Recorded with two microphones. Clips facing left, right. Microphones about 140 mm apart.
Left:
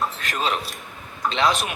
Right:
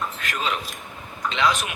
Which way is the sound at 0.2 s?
30° left (ahead or behind).